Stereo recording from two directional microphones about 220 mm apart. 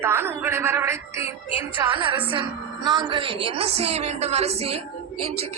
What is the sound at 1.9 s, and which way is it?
A woman's voice, 20° right (ahead or behind).